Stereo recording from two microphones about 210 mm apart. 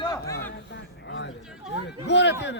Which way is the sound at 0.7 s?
60° left (ahead or behind).